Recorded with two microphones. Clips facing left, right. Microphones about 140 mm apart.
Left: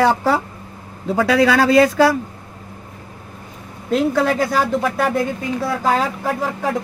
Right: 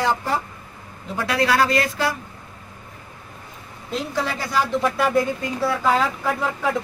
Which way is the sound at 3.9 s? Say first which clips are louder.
Left 9 dB; 55° left (ahead or behind).